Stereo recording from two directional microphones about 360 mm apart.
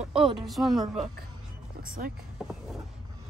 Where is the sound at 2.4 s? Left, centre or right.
Centre.